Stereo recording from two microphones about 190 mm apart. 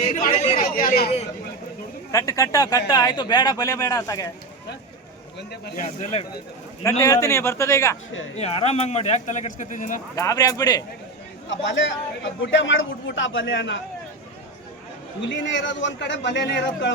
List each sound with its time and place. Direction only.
0.2 s speech: 45° left (ahead or behind)
2.1 s speech: 15° left (ahead or behind)
5.4 s speech: 60° left (ahead or behind)
5.8 s speech: 35° left (ahead or behind)
7.0 s a man's voice: 15° left (ahead or behind)
8.4 s speech: 35° left (ahead or behind)
10.2 s speech: 15° left (ahead or behind)
11.4 s a man's voice: 75° left (ahead or behind)
15.2 s a man's voice: 70° left (ahead or behind)